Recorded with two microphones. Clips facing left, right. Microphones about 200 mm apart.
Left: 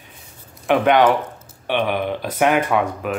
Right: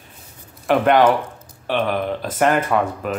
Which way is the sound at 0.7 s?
Centre (ahead or behind).